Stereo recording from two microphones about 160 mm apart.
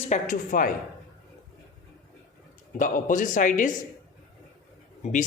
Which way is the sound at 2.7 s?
55° left (ahead or behind).